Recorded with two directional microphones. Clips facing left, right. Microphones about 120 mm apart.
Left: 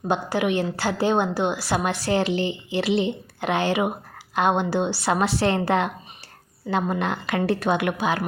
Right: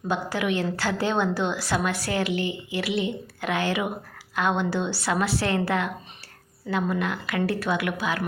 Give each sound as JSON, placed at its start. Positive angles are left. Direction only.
{"t": 0.1, "sound": "a woman's voice", "side_deg": 20}
{"t": 2.0, "sound": "speech", "side_deg": 30}
{"t": 7.0, "sound": "speech", "side_deg": 30}